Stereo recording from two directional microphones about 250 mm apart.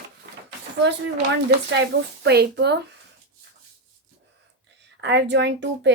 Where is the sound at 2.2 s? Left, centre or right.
Right.